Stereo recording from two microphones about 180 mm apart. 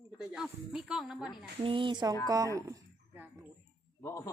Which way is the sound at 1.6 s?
30° right (ahead or behind).